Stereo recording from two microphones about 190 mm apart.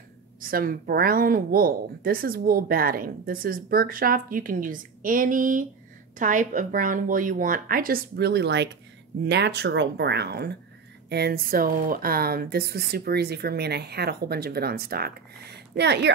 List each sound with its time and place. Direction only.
0.4 s speech: 50° right (ahead or behind)